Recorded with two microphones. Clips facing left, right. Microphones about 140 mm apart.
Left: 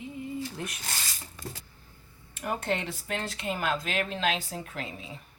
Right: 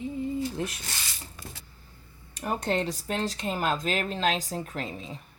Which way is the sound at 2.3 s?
35° right (ahead or behind).